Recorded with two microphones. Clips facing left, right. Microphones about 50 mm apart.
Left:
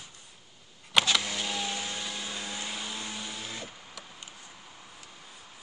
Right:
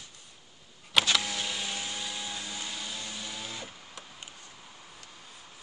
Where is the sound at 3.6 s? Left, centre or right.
Centre.